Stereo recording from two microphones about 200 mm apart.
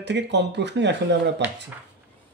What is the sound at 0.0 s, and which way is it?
Speech, 60° right (ahead or behind).